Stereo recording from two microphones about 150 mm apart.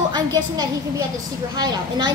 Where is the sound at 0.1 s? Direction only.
25° right (ahead or behind).